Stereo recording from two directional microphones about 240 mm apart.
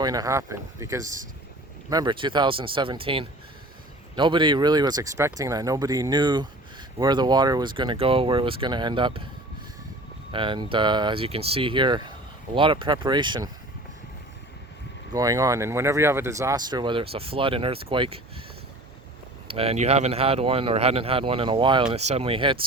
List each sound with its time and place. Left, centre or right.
0.0 s speech: centre
10.3 s speech: right
15.1 s speech: centre
19.5 s speech: right